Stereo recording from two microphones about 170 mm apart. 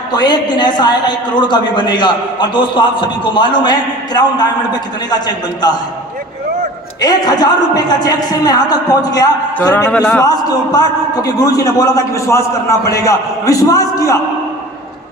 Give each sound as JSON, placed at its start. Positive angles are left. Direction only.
{"t": 0.1, "sound": "a man's voice", "side_deg": 25}
{"t": 7.0, "sound": "a man's voice", "side_deg": 25}